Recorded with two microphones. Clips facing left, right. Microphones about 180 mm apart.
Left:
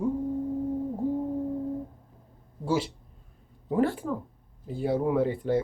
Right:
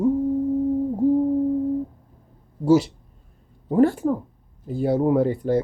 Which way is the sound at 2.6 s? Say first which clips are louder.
Right 10 dB; 45° right (ahead or behind).